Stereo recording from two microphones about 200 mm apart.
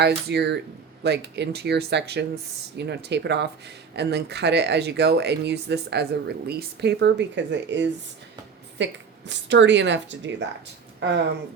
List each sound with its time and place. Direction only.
0.0 s speech: 55° right (ahead or behind)